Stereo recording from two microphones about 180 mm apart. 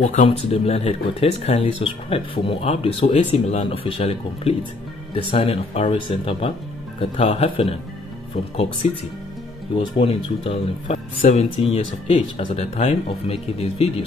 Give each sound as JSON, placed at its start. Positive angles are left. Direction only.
{"t": 0.0, "sound": "speech", "side_deg": 40}
{"t": 8.8, "sound": "speech", "side_deg": 40}